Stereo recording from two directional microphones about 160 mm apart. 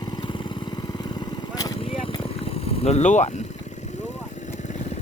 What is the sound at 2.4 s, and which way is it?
Vehicle, 40° left (ahead or behind).